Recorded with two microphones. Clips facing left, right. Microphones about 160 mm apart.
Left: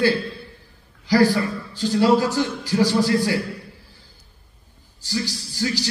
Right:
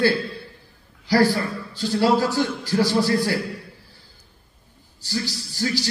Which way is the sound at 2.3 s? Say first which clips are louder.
Even; 15° left (ahead or behind).